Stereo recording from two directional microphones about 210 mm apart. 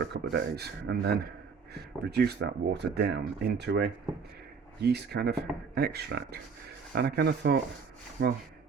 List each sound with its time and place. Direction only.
0.0 s speech: 50° right (ahead or behind)